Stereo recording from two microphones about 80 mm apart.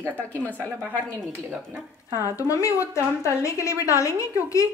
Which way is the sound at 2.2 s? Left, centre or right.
Left.